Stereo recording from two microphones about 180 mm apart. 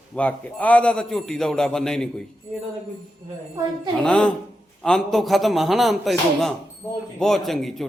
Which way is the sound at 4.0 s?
5° left (ahead or behind).